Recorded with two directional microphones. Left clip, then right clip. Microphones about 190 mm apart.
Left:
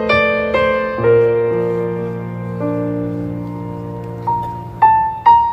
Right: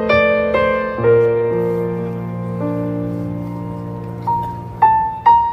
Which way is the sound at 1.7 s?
35° left (ahead or behind).